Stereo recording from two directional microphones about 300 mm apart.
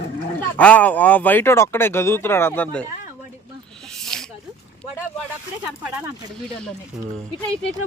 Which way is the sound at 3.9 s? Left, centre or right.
Centre.